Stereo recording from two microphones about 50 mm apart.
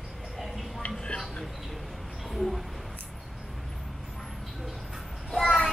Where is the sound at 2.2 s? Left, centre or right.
Centre.